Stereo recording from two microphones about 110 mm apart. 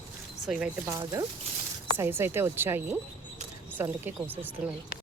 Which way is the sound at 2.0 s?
20° right (ahead or behind).